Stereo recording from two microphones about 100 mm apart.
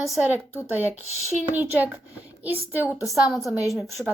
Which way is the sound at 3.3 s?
Centre (ahead or behind).